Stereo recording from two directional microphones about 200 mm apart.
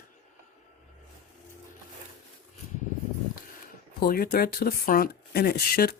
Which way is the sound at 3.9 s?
45° left (ahead or behind).